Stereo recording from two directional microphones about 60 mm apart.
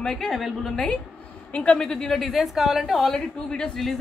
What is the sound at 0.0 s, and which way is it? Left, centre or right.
Speech, centre.